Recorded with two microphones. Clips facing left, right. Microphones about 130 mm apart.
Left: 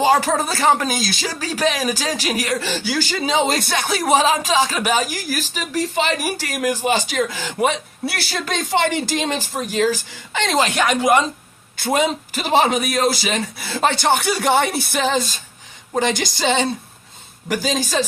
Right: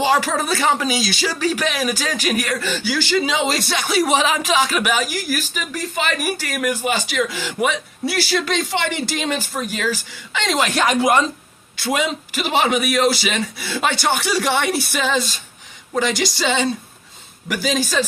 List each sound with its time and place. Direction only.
0.0 s a woman's voice: 40° left (ahead or behind)
0.6 s a woman's voice: 50° left (ahead or behind)
4.1 s a woman's voice: 35° left (ahead or behind)
11.9 s a woman's voice: 45° left (ahead or behind)